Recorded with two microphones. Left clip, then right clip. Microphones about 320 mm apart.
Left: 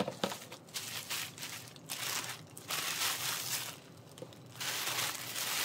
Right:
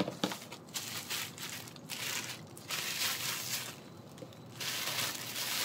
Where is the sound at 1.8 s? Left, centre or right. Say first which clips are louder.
Even; centre.